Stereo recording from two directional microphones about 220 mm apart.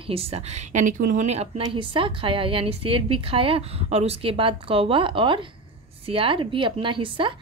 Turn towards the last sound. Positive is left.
turn(degrees=-25)  # may be behind; listen again after turning